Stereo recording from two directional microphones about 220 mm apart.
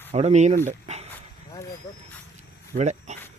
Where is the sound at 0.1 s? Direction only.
30° right (ahead or behind).